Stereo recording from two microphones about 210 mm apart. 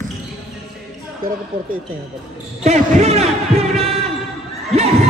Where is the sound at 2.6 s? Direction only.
30° right (ahead or behind).